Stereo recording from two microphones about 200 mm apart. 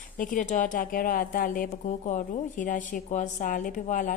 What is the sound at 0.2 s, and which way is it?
A woman's voice, 40° left (ahead or behind).